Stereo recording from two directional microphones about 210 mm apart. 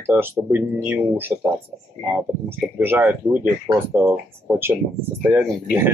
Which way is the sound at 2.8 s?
10° right (ahead or behind).